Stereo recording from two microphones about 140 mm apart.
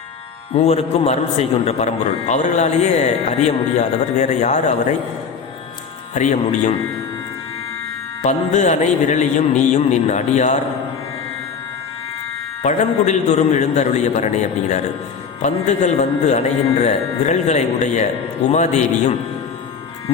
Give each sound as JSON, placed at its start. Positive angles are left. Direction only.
{"t": 0.5, "sound": "a man's voice", "side_deg": 50}
{"t": 6.1, "sound": "a man's voice", "side_deg": 55}
{"t": 8.2, "sound": "a man's voice", "side_deg": 55}
{"t": 12.6, "sound": "a man's voice", "side_deg": 55}
{"t": 15.4, "sound": "a man's voice", "side_deg": 55}